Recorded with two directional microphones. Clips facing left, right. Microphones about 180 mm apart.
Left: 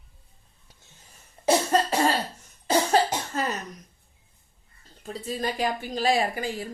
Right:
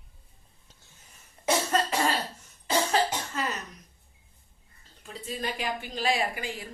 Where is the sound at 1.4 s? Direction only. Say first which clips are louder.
Left 4 dB; 35° left (ahead or behind).